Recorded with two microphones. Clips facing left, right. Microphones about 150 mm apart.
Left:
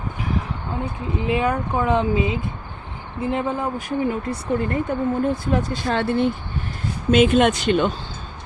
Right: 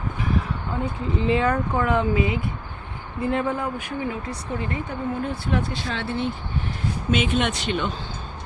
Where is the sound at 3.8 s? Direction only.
40° left (ahead or behind).